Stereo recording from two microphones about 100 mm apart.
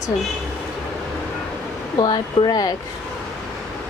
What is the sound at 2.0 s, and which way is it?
Speech, 45° left (ahead or behind).